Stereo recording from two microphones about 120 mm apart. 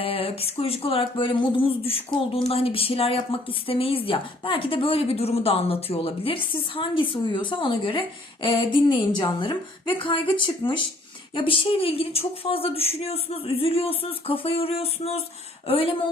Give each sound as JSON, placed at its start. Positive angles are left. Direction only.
{"t": 0.0, "sound": "speech", "side_deg": 50}